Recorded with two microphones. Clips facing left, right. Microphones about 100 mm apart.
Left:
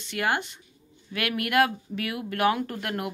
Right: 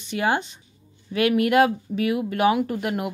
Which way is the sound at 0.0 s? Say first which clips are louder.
Right 4 dB; 20° right (ahead or behind).